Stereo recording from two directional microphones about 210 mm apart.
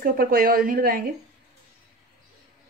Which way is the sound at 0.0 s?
45° right (ahead or behind).